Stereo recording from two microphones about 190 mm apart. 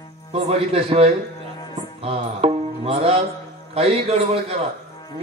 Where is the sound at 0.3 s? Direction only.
30° right (ahead or behind).